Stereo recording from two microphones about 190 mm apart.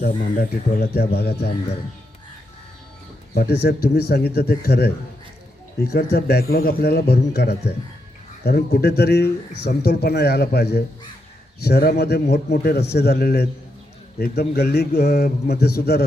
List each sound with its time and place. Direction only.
0.0 s speech: 55° left (ahead or behind)
3.3 s speech: 55° left (ahead or behind)